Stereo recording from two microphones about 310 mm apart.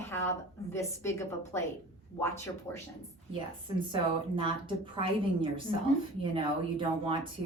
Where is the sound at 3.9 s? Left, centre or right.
Centre.